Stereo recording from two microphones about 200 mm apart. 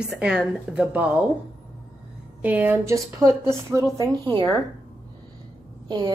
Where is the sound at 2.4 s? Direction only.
10° right (ahead or behind).